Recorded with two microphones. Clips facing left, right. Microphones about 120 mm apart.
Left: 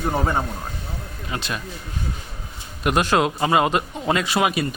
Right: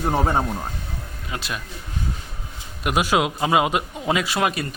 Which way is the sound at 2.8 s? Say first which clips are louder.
Left 1 dB; 5° right (ahead or behind).